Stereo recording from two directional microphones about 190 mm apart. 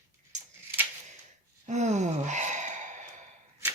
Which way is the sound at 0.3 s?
40° right (ahead or behind).